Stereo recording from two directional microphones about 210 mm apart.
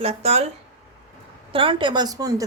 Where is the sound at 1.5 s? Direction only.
25° right (ahead or behind).